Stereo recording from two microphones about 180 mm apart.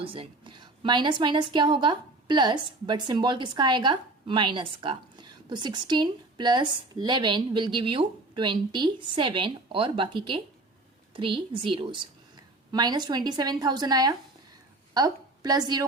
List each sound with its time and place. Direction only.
0.0 s a woman's voice: 30° right (ahead or behind)